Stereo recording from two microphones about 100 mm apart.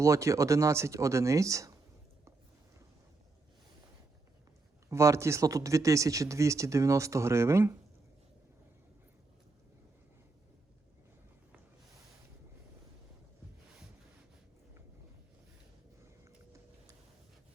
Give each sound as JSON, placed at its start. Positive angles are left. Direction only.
{"t": 0.0, "sound": "speech", "side_deg": -30}
{"t": 4.9, "sound": "speech", "side_deg": -30}